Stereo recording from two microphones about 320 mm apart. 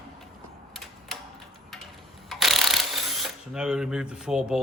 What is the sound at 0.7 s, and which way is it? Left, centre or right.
Tick-tock, centre.